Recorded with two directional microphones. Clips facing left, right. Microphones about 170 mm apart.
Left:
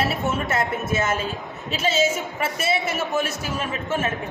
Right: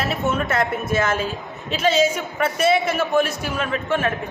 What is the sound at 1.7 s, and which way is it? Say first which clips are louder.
A man's voice: right 3 dB; 5° left (ahead or behind).